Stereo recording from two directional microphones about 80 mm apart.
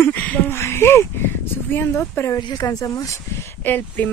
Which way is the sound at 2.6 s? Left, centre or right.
Left.